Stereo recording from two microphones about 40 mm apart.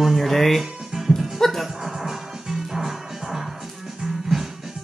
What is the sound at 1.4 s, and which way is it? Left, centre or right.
Music, centre.